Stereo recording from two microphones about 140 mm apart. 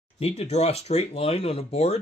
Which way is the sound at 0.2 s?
50° left (ahead or behind).